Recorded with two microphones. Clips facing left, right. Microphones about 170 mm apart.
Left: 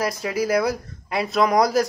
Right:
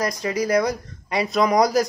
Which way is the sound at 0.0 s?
5° left (ahead or behind).